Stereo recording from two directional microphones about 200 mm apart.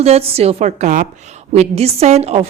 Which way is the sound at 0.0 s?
30° right (ahead or behind).